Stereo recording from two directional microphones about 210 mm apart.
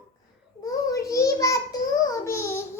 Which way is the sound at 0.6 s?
15° left (ahead or behind).